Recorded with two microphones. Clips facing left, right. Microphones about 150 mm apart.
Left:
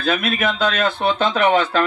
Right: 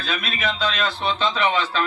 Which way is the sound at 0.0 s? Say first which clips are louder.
Left 7 dB; 50° left (ahead or behind).